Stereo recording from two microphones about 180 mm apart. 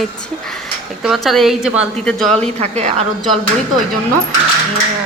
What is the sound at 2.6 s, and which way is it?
Speech, 35° right (ahead or behind).